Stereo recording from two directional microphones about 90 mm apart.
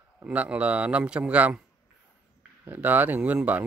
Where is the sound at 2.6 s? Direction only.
20° right (ahead or behind).